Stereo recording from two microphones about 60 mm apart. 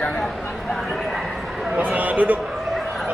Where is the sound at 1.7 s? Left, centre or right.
Right.